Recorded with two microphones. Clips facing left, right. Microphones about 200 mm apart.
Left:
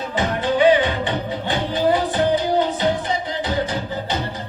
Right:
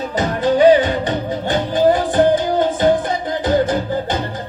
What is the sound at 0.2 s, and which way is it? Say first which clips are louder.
Music: right 4 dB; 40° right (ahead or behind).